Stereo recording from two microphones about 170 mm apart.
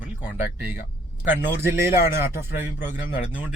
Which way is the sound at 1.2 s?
15° right (ahead or behind).